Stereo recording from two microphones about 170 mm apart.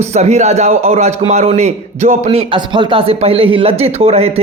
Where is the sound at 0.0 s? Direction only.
40° right (ahead or behind).